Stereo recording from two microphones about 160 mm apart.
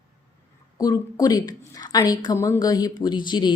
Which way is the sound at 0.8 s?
20° left (ahead or behind).